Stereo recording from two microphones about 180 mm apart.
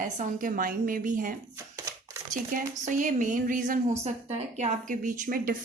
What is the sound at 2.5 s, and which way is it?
A woman's voice, 50° right (ahead or behind).